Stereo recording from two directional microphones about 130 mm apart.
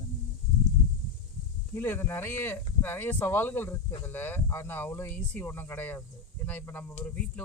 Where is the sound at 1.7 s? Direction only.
15° left (ahead or behind).